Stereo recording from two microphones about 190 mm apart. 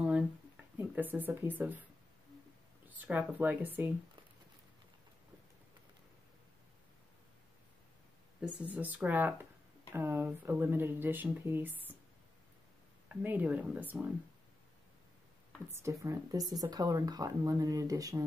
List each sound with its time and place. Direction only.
0.7 s speech: 10° right (ahead or behind)
3.0 s speech: 10° right (ahead or behind)
8.4 s speech: 5° right (ahead or behind)
13.1 s speech: 10° right (ahead or behind)
15.7 s speech: 15° right (ahead or behind)